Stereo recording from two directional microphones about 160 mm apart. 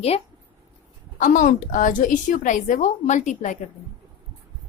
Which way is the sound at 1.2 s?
55° left (ahead or behind).